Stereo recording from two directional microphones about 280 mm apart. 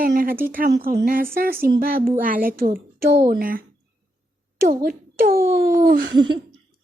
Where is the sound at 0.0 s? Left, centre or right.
Right.